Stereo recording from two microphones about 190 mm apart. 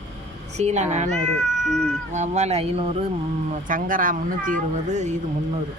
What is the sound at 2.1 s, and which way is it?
Speech, 35° right (ahead or behind).